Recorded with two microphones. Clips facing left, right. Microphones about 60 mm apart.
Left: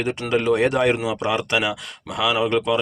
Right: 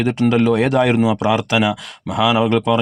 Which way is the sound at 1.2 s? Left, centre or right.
Right.